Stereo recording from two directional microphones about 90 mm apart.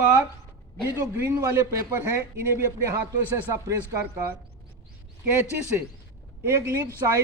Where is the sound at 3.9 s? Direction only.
35° right (ahead or behind).